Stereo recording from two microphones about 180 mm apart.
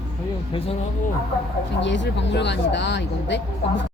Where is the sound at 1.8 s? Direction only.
80° left.